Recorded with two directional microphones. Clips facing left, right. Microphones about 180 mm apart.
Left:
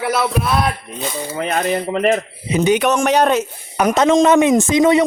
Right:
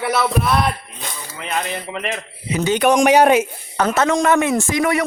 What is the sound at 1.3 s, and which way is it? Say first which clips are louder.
Speech: left 6 dB; 45° left (ahead or behind).